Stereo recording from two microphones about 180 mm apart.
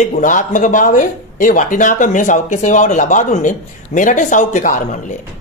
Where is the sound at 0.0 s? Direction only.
45° left (ahead or behind).